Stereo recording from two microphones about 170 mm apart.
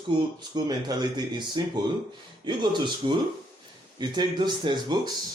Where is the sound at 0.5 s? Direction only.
25° right (ahead or behind).